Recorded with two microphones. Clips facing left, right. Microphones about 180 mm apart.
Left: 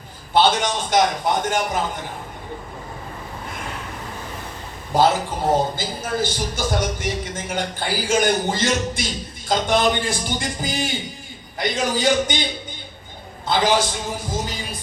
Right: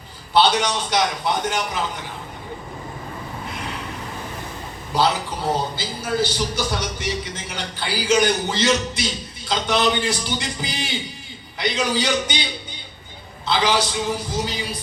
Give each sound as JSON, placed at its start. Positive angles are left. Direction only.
{"t": 0.3, "sound": "a man's voice", "side_deg": 45}
{"t": 4.9, "sound": "a man's voice", "side_deg": 50}
{"t": 13.5, "sound": "a man's voice", "side_deg": 45}